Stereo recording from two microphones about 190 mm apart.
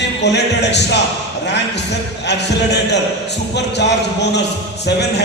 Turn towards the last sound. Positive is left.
turn(degrees=60)  # may be behind; listen again after turning